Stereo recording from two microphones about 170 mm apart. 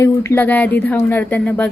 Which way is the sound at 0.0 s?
15° left (ahead or behind).